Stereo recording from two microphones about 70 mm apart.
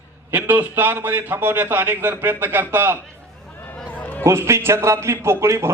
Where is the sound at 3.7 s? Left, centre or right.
Left.